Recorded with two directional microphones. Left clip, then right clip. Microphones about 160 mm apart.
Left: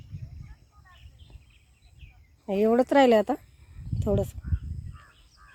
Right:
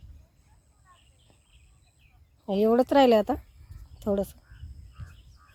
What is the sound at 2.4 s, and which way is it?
Speech, 20° right (ahead or behind).